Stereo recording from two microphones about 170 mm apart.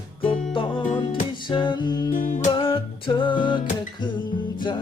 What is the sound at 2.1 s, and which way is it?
Music, 50° left (ahead or behind).